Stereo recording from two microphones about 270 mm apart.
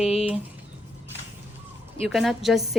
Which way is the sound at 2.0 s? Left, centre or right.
Centre.